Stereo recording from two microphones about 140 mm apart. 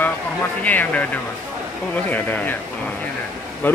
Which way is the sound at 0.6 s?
10° left (ahead or behind).